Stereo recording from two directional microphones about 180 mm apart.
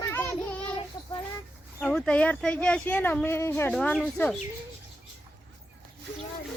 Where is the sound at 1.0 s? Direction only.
20° left (ahead or behind).